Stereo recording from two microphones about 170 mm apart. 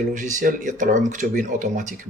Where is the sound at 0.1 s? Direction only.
50° right (ahead or behind).